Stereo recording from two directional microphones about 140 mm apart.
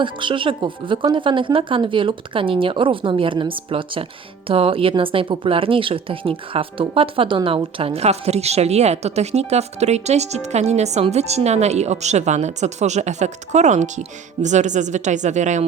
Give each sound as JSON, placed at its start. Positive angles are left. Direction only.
{"t": 0.0, "sound": "speech", "side_deg": -35}